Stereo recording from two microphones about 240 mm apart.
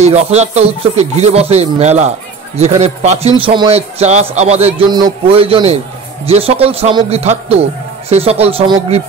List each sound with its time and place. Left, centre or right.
0.0 s a man's voice: right